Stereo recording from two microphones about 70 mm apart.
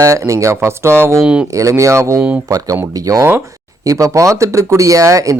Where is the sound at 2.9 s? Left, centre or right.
Right.